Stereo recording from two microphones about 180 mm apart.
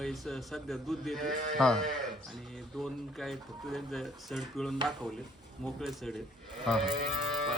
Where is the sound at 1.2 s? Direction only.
50° right (ahead or behind).